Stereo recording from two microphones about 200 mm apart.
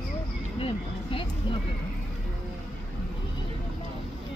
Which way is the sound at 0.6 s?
30° left (ahead or behind).